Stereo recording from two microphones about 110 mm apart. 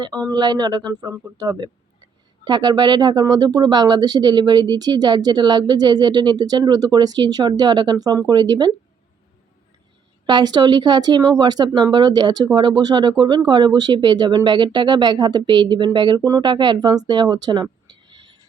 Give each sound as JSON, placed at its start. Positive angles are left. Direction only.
{"t": 0.3, "sound": "speech", "side_deg": -40}
{"t": 10.2, "sound": "speech", "side_deg": -40}